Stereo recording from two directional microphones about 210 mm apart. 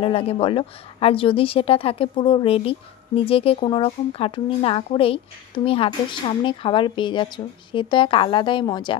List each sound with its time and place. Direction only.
0.0 s speech: 25° left (ahead or behind)